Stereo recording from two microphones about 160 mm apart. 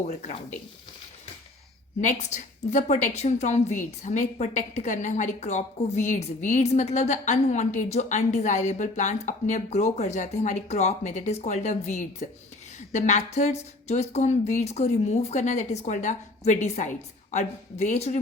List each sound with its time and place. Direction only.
2.0 s a woman's voice: 50° left (ahead or behind)